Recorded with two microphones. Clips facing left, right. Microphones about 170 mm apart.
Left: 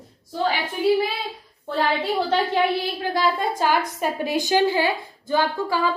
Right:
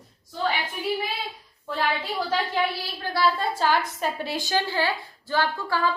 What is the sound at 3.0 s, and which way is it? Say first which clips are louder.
A woman's voice: even; 15° left (ahead or behind).